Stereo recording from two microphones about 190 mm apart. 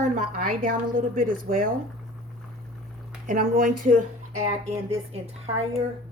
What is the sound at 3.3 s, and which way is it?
A woman's voice, 45° right (ahead or behind).